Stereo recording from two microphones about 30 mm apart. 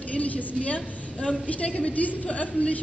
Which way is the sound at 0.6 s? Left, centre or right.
Left.